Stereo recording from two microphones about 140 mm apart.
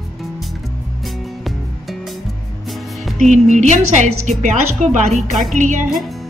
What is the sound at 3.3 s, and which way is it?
A woman's voice, 60° right (ahead or behind).